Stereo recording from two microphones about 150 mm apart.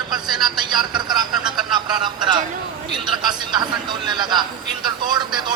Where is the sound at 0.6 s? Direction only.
30° right (ahead or behind).